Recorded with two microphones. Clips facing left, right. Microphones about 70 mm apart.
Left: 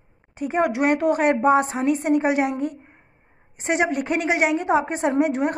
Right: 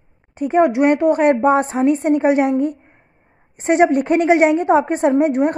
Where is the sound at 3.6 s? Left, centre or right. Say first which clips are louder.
Right 8 dB; right.